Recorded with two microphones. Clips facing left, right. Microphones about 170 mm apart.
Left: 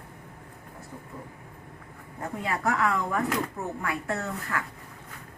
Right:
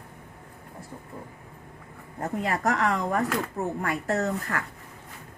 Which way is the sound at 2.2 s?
40° right (ahead or behind).